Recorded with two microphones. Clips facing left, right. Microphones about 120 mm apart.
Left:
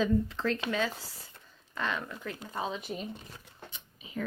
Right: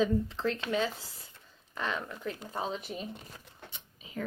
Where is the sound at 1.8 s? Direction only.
20° right (ahead or behind).